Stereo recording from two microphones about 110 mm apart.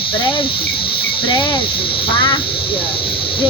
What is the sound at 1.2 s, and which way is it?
Speech, 45° left (ahead or behind).